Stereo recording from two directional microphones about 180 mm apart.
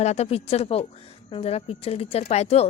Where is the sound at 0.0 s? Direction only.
35° left (ahead or behind).